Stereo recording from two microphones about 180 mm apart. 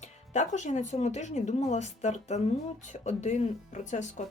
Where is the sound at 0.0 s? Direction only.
40° left (ahead or behind).